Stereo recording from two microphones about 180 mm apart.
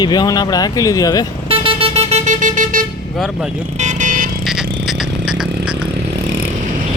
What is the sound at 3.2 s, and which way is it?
Speech, centre (ahead or behind).